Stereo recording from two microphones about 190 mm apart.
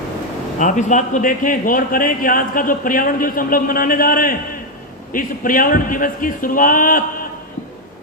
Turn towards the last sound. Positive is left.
turn(degrees=45)  # may be behind; listen again after turning